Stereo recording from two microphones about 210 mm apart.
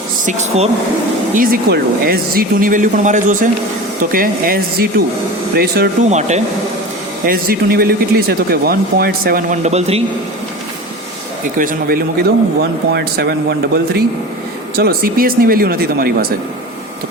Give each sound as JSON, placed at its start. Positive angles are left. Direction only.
{"t": 0.3, "sound": "speech", "side_deg": -30}
{"t": 1.4, "sound": "speech", "side_deg": -45}
{"t": 6.1, "sound": "speech", "side_deg": -35}
{"t": 7.3, "sound": "speech", "side_deg": -45}
{"t": 11.5, "sound": "speech", "side_deg": -40}
{"t": 12.9, "sound": "speech", "side_deg": -50}
{"t": 14.8, "sound": "speech", "side_deg": -45}